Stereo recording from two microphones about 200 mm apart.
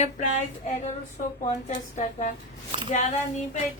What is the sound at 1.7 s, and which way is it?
Speech, 35° left (ahead or behind).